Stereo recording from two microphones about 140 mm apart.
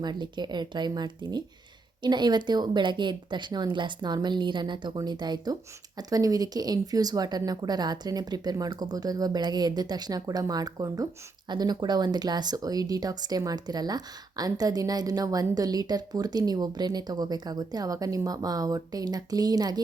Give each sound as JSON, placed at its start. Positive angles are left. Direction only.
{"t": 0.0, "sound": "speech", "side_deg": -30}